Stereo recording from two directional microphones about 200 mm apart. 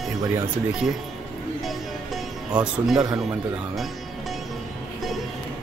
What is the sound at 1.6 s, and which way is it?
Music, centre (ahead or behind).